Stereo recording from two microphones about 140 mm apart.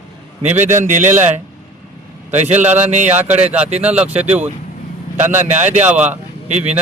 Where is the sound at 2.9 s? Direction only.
55° right (ahead or behind).